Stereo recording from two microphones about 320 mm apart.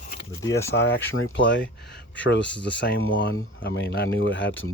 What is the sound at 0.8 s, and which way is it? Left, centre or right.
Speech, left.